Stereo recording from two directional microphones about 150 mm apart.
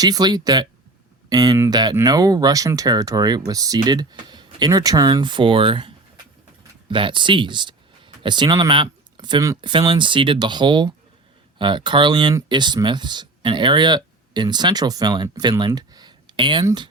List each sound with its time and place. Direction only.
0.0 s speech: 25° right (ahead or behind)